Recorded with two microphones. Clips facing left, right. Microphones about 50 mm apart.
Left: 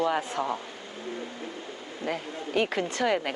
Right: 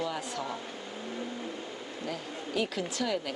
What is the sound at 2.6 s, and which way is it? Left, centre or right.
Speech, left.